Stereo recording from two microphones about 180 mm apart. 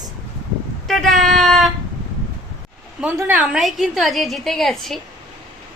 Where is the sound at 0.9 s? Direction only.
Centre (ahead or behind).